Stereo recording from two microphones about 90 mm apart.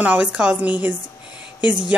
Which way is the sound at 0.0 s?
15° right (ahead or behind).